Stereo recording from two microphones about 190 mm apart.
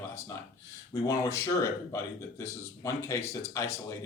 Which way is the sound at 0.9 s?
20° left (ahead or behind).